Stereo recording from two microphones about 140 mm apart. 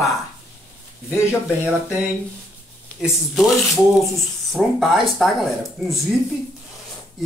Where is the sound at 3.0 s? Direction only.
Centre (ahead or behind).